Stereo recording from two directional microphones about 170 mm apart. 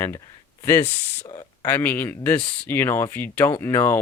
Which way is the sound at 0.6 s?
15° left (ahead or behind).